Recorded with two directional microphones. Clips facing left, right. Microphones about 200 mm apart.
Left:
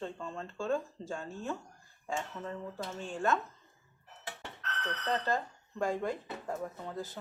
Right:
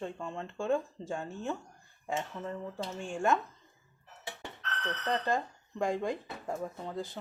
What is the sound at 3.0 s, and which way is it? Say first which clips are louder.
Speech: right 2 dB; 15° right (ahead or behind).